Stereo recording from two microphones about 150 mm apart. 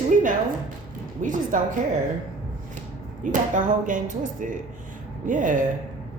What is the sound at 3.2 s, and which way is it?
A woman's voice, 60° right (ahead or behind).